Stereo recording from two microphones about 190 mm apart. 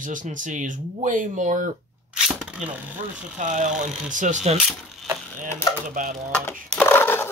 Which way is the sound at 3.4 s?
40° right (ahead or behind).